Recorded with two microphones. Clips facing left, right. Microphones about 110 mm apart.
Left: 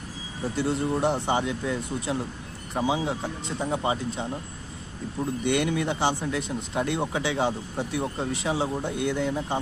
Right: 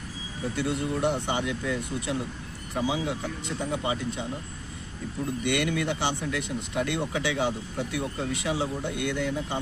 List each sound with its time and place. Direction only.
0.7 s speech: 30° left (ahead or behind)
5.5 s speech: 25° left (ahead or behind)